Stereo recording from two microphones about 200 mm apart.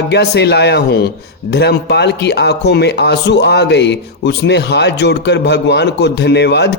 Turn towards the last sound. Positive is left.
turn(degrees=55)  # may be behind; listen again after turning